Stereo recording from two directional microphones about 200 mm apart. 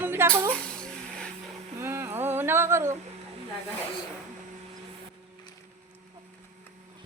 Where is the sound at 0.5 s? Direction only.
5° left (ahead or behind).